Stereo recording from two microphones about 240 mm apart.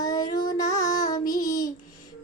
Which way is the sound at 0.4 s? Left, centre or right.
Centre.